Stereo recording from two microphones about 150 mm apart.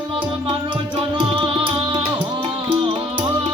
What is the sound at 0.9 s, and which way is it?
Music, 35° right (ahead or behind).